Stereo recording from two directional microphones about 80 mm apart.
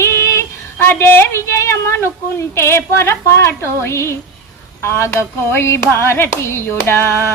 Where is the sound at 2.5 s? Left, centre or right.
Left.